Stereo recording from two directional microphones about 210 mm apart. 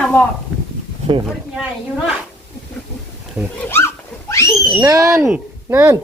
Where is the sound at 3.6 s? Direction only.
10° left (ahead or behind).